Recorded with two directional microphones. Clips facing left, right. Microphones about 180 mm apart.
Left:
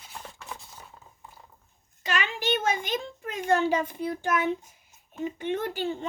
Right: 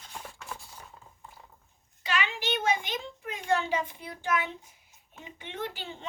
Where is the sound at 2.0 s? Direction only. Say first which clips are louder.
Left 2 dB; 45° left (ahead or behind).